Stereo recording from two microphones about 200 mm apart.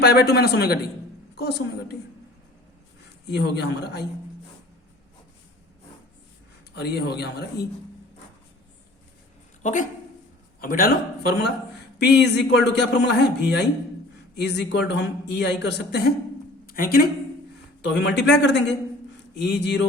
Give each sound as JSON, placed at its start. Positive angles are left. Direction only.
{"t": 0.0, "sound": "speech", "side_deg": 55}
{"t": 3.3, "sound": "speech", "side_deg": 55}
{"t": 6.7, "sound": "speech", "side_deg": 55}
{"t": 9.6, "sound": "a woman's voice", "side_deg": 40}
{"t": 16.6, "sound": "a man's voice", "side_deg": 45}
{"t": 17.8, "sound": "speech", "side_deg": 60}